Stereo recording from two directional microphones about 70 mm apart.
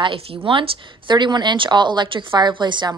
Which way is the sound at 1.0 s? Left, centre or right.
Right.